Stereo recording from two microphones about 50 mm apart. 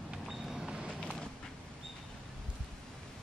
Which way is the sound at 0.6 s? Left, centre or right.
Centre.